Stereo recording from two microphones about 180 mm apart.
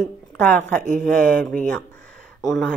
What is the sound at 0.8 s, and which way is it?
Speech, 45° right (ahead or behind).